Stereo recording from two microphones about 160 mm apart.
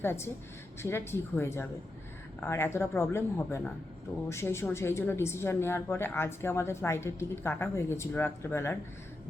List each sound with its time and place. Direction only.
0.0 s a woman's voice: 15° left (ahead or behind)